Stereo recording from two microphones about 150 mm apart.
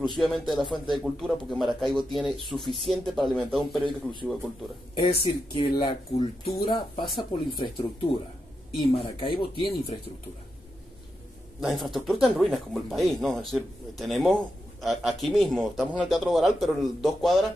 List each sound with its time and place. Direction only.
0.1 s speech: centre (ahead or behind)
5.2 s speech: 30° left (ahead or behind)
11.6 s speech: centre (ahead or behind)